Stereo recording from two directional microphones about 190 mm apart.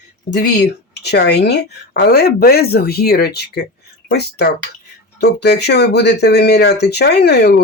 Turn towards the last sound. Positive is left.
turn(degrees=60)  # may be behind; listen again after turning